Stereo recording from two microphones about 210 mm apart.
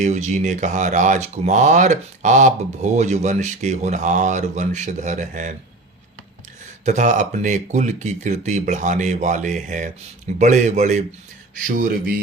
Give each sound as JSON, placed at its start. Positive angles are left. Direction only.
{"t": 0.0, "sound": "speech", "side_deg": -35}
{"t": 6.8, "sound": "speech", "side_deg": -35}
{"t": 11.6, "sound": "mantra", "side_deg": -45}